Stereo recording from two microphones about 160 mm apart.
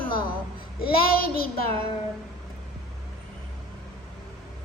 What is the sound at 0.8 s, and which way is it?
Child singing, 70° left (ahead or behind).